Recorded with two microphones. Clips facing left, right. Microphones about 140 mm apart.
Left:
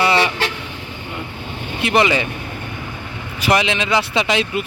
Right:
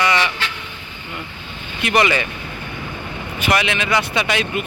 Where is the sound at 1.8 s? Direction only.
25° left (ahead or behind).